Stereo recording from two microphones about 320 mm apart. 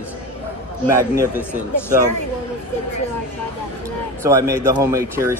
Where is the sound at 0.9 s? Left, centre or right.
Centre.